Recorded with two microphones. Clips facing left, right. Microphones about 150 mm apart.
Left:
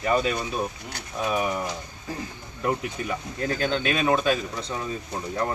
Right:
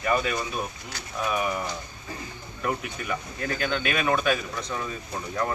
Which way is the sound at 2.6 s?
25° left (ahead or behind).